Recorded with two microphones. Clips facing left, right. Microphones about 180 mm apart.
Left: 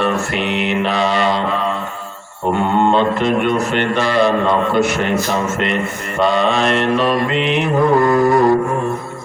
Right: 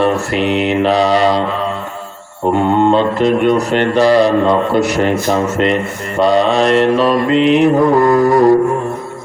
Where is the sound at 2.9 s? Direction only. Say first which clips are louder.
Right 3 dB; 35° right (ahead or behind).